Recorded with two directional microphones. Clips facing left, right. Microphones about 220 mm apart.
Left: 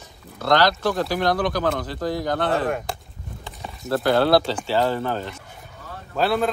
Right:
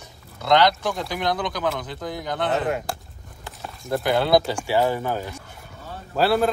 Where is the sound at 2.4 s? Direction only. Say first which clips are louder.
Right 1 dB; 20° right (ahead or behind).